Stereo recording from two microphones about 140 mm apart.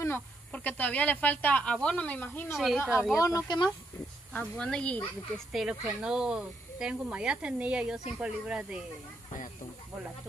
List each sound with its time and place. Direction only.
0.5 s speech: 10° left (ahead or behind)
2.5 s speech: centre (ahead or behind)
3.2 s speech: 25° left (ahead or behind)
4.3 s speech: 10° left (ahead or behind)
5.5 s speech: 5° right (ahead or behind)